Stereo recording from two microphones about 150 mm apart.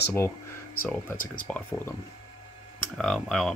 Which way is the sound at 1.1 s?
65° left (ahead or behind).